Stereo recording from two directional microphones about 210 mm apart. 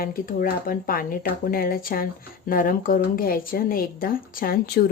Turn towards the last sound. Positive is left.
turn(degrees=45)  # may be behind; listen again after turning